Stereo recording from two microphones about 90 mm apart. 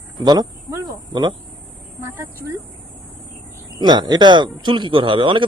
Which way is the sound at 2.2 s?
30° right (ahead or behind).